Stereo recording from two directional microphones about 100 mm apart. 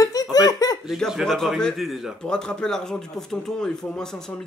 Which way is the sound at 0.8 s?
Centre (ahead or behind).